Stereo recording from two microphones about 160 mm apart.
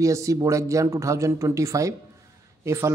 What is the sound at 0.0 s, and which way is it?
Speech, 20° right (ahead or behind).